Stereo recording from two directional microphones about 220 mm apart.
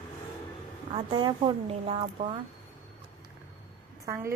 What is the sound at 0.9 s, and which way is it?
A woman's voice, 20° right (ahead or behind).